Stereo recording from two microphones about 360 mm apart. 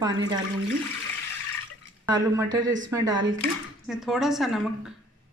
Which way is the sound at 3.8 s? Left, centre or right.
Centre.